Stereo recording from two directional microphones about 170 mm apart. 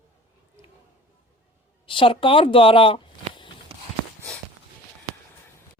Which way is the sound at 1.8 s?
30° left (ahead or behind).